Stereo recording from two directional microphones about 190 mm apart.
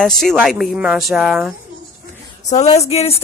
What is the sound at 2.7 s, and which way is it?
Speech, 35° left (ahead or behind).